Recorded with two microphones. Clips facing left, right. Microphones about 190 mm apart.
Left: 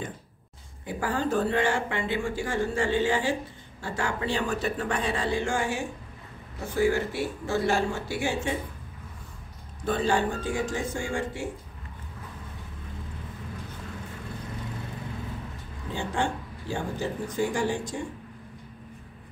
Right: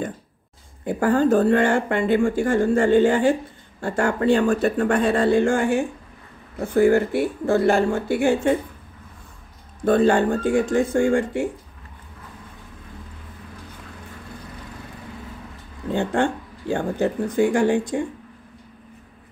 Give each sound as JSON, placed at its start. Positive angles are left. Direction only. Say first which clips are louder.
{"t": 0.8, "sound": "speech", "louder": "right 10 dB", "side_deg": -55}
{"t": 9.8, "sound": "speech", "louder": "right 9 dB", "side_deg": -55}
{"t": 15.9, "sound": "speech", "louder": "right 8 dB", "side_deg": -60}